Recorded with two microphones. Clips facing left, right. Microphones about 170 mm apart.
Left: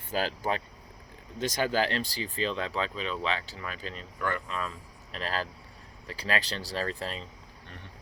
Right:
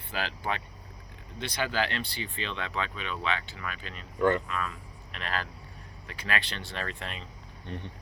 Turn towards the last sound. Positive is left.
turn(degrees=-20)  # may be behind; listen again after turning